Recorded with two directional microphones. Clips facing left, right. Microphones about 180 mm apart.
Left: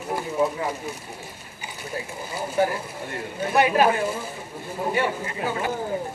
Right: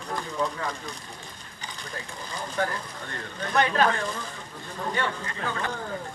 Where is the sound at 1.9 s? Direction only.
10° left (ahead or behind).